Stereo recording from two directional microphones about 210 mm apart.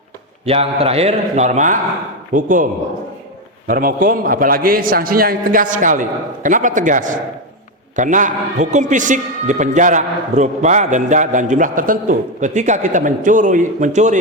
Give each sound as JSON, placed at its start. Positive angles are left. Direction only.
{"t": 0.4, "sound": "a man's voice", "side_deg": -30}
{"t": 3.7, "sound": "a man's voice", "side_deg": -45}